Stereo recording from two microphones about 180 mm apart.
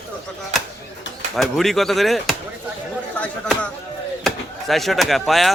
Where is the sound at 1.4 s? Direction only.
Centre (ahead or behind).